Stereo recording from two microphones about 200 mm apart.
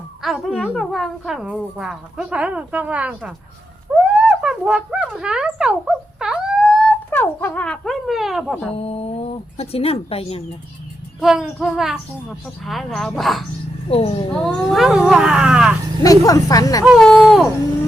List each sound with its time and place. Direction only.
0.2 s a woman's voice: centre (ahead or behind)
8.7 s speech: 30° left (ahead or behind)
11.2 s a woman's voice: centre (ahead or behind)
13.8 s speech: 30° left (ahead or behind)
14.4 s a woman's voice: centre (ahead or behind)
16.0 s speech: 15° left (ahead or behind)
16.8 s a woman's voice: centre (ahead or behind)